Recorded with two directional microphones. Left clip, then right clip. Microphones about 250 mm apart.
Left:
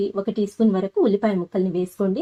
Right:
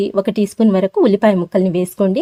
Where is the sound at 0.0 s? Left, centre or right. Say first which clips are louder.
Right 7 dB; right.